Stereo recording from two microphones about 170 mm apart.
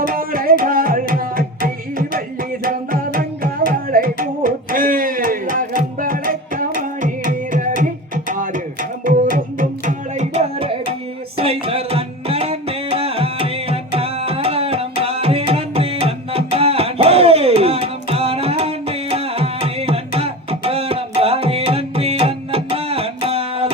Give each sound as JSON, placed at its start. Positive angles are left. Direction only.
{"t": 0.0, "sound": "music", "side_deg": -55}